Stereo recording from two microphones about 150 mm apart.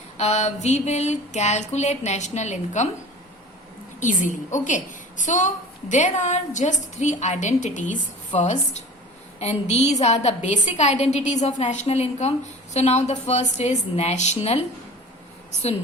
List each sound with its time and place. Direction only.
0.2 s a woman's voice: 50° left (ahead or behind)
4.0 s a woman's voice: 55° left (ahead or behind)